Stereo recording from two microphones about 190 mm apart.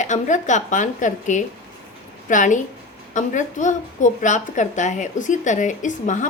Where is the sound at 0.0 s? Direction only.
40° left (ahead or behind).